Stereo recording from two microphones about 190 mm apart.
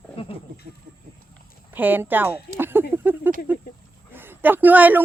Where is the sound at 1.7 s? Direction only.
10° right (ahead or behind).